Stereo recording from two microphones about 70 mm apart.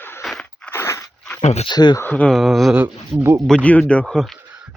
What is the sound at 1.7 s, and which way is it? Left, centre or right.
Speech, left.